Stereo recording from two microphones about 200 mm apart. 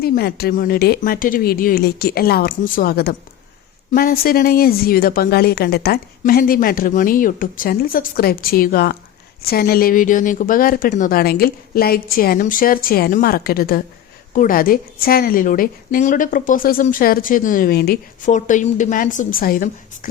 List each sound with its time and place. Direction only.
0.0 s a woman's voice: 50° left (ahead or behind)